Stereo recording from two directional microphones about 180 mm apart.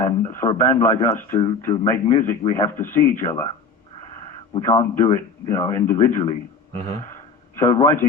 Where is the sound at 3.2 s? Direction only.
30° left (ahead or behind).